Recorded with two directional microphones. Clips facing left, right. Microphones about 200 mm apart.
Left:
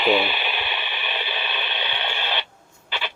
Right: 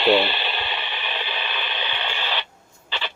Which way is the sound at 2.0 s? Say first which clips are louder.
Even; 15° left (ahead or behind).